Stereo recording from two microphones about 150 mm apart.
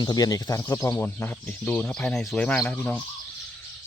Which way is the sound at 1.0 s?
10° left (ahead or behind).